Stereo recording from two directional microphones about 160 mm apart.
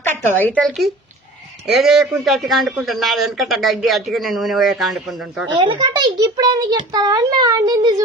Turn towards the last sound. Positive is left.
turn(degrees=-25)  # may be behind; listen again after turning